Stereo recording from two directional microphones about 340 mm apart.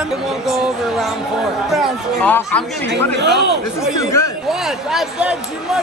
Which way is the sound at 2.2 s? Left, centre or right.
Centre.